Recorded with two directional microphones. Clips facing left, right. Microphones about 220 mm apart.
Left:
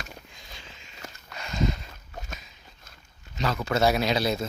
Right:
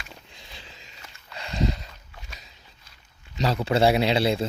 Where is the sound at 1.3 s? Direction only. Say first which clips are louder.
Right 1 dB; 30° right (ahead or behind).